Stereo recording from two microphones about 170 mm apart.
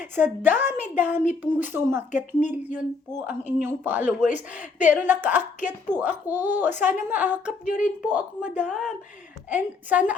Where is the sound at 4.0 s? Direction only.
45° left (ahead or behind).